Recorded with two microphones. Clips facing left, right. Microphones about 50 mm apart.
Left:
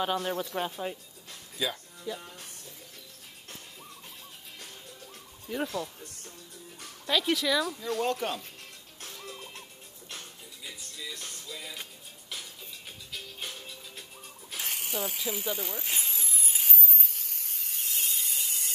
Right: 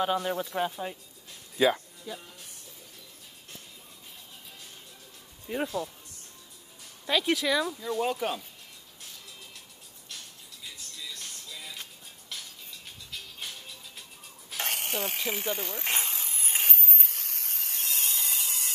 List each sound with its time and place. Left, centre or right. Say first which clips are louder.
0.0 s speech: right 2 dB; centre
1.6 s speech: right 9 dB; right
2.1 s speech: left 3 dB; centre
5.5 s speech: right 1 dB; right
7.1 s speech: right 1 dB; centre
9.0 s music: left 6 dB; left
10.6 s music: left 1 dB; centre
14.6 s a sound: right 2 dB; right